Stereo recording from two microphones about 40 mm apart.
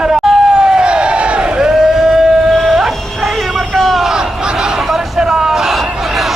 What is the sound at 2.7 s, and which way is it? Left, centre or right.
Music, centre.